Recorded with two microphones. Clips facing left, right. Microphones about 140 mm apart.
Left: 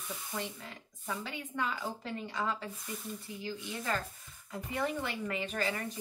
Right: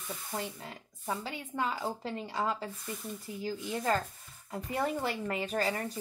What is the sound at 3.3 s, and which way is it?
Speech, 40° right (ahead or behind).